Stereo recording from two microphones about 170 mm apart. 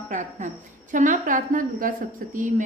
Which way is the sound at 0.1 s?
45° right (ahead or behind).